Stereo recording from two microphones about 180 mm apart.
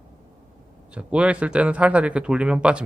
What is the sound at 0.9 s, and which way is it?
A man's voice, 5° right (ahead or behind).